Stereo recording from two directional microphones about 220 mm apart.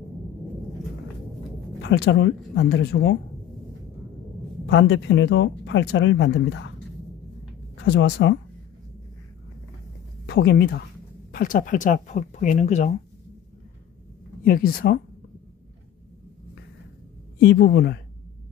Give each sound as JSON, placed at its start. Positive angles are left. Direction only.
{"t": 1.8, "sound": "speech", "side_deg": 55}
{"t": 4.6, "sound": "speech", "side_deg": 55}
{"t": 7.7, "sound": "speech", "side_deg": 50}
{"t": 10.2, "sound": "speech", "side_deg": 45}
{"t": 14.4, "sound": "speech", "side_deg": 40}
{"t": 17.4, "sound": "speech", "side_deg": 50}